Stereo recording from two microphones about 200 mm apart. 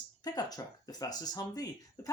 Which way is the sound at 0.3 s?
20° left (ahead or behind).